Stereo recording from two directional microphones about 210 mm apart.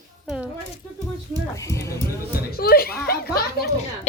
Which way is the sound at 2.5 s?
45° left (ahead or behind).